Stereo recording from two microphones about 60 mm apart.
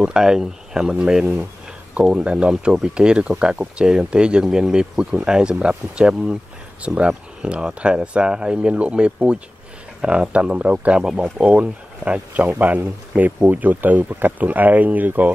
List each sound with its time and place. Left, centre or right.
0.0 s speech: centre; by 15.3 s right